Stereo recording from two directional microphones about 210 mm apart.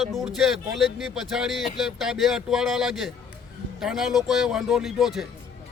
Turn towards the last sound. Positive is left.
turn(degrees=0)  # may be behind; listen again after turning